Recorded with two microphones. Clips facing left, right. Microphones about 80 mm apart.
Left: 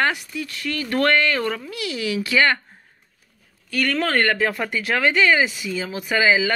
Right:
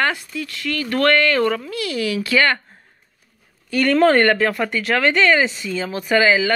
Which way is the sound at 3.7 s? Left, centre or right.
Right.